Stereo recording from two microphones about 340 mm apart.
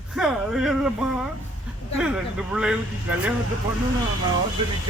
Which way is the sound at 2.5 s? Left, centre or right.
Centre.